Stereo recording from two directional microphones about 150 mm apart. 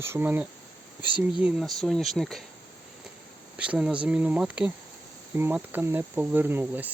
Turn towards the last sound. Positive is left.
turn(degrees=-10)  # may be behind; listen again after turning